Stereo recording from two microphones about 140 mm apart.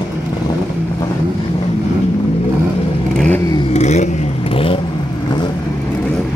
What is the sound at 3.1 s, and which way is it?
Vehicle, 5° left (ahead or behind).